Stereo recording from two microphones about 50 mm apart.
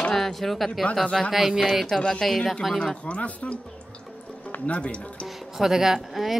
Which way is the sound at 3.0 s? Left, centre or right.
Left.